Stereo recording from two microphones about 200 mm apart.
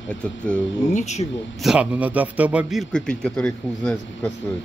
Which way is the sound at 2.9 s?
5° left (ahead or behind).